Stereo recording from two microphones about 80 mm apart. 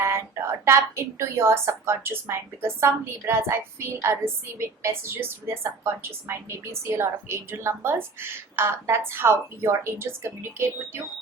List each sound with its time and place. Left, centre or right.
0.0 s speech: right